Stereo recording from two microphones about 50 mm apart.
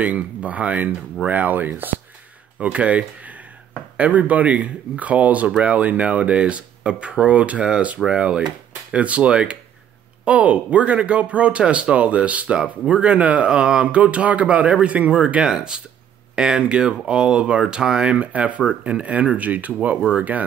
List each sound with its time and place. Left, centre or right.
0.0 s speech: right
2.6 s speech: right
18.2 s speech: right